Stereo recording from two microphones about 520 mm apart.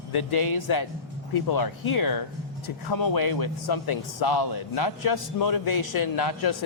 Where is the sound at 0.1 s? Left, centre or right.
Left.